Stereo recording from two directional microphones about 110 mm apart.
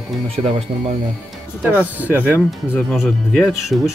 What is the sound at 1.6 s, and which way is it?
Speech, 15° right (ahead or behind).